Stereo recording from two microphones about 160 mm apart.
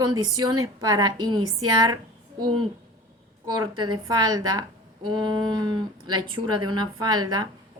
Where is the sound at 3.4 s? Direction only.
25° right (ahead or behind).